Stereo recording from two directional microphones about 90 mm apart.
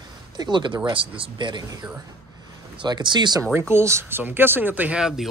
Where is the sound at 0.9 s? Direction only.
75° right (ahead or behind).